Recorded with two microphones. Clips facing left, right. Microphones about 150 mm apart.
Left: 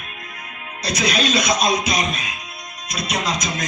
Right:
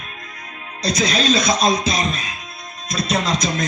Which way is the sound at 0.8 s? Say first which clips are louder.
Right 2 dB; 25° right (ahead or behind).